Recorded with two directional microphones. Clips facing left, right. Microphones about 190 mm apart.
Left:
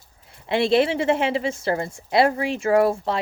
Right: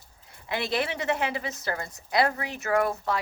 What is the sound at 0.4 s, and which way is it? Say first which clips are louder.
A woman's voice: left 10 dB; 25° left (ahead or behind).